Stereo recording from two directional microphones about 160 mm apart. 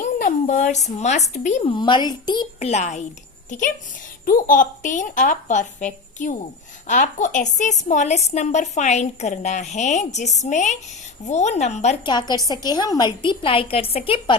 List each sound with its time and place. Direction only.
0.0 s a woman's voice: 50° left (ahead or behind)
1.6 s a woman's voice: 30° left (ahead or behind)
2.6 s a woman's voice: 45° left (ahead or behind)
4.3 s a woman's voice: 55° left (ahead or behind)
12.0 s a woman's voice: 25° left (ahead or behind)